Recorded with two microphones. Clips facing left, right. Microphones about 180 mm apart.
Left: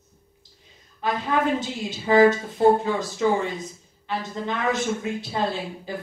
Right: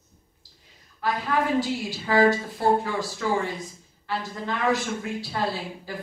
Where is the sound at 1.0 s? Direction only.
20° left (ahead or behind).